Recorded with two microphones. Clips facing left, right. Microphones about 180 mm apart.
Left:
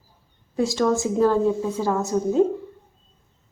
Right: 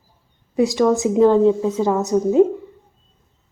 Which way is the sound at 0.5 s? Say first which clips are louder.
Right 5 dB; 20° right (ahead or behind).